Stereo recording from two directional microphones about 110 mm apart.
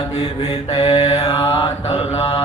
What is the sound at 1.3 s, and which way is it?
Mantra, 35° left (ahead or behind).